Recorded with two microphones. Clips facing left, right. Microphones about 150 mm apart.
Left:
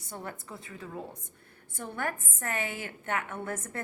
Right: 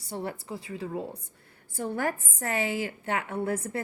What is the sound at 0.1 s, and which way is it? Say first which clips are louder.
A woman's voice: right 6 dB; 30° right (ahead or behind).